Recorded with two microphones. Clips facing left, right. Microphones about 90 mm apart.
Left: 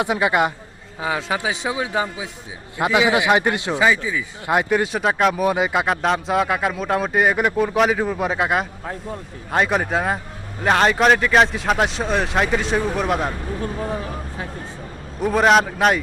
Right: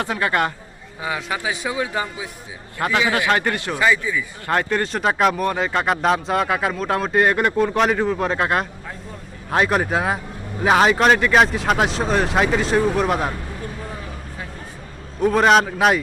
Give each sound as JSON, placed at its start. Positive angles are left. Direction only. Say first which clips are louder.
{"t": 0.0, "sound": "a man's voice", "louder": "left 2 dB", "side_deg": 15}
{"t": 1.0, "sound": "a man's voice", "louder": "left 2 dB", "side_deg": 25}
{"t": 5.5, "sound": "a man's voice", "louder": "left 2 dB", "side_deg": 15}
{"t": 5.8, "sound": "speech", "louder": "right 1 dB", "side_deg": 0}
{"t": 13.8, "sound": "a sound", "louder": "left 6 dB", "side_deg": 25}
{"t": 15.2, "sound": "speech", "louder": "right 1 dB", "side_deg": 0}